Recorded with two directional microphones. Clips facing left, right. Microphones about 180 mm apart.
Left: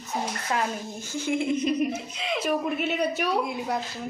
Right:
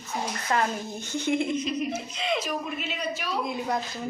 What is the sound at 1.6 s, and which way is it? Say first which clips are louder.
Speech: left 4 dB; 55° left (ahead or behind).